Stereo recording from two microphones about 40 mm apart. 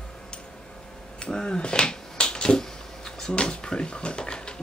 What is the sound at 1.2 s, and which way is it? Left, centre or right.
Finger snapping, left.